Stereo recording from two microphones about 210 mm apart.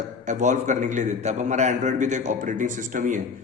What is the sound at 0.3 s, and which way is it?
A man's voice, 35° right (ahead or behind).